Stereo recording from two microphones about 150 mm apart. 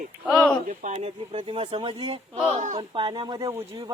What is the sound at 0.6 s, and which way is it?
Speech, 50° right (ahead or behind).